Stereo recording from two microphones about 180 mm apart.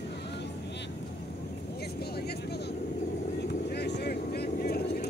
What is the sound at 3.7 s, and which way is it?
Vehicle, 65° left (ahead or behind).